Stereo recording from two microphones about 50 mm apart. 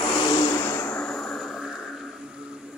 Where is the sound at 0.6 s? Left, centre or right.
Left.